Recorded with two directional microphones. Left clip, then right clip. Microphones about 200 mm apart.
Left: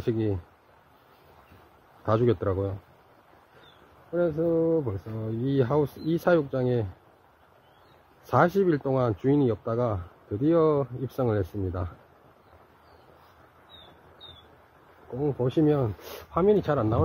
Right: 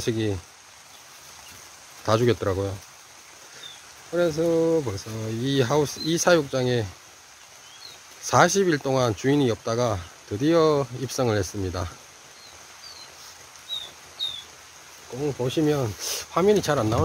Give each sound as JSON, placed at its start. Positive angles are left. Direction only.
{"t": 0.0, "sound": "speech", "side_deg": -10}
{"t": 2.0, "sound": "speech", "side_deg": -10}
{"t": 4.1, "sound": "speech", "side_deg": -15}
{"t": 8.3, "sound": "speech", "side_deg": -5}
{"t": 15.1, "sound": "speech", "side_deg": 0}
{"t": 15.8, "sound": "speech", "side_deg": -10}